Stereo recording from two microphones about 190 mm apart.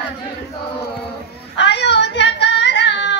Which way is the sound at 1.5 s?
65° left (ahead or behind).